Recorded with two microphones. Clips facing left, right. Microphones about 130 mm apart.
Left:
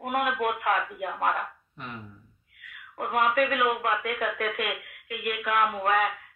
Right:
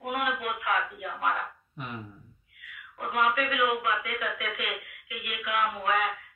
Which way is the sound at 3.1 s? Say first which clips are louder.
Left 3 dB; 50° left (ahead or behind).